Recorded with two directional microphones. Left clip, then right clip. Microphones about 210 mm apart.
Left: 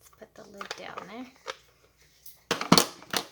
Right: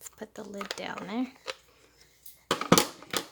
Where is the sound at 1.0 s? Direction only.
50° right (ahead or behind).